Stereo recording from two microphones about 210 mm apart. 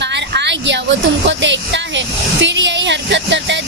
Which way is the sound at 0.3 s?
55° right (ahead or behind).